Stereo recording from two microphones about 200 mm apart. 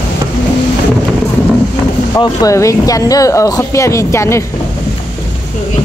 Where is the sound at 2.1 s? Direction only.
20° left (ahead or behind).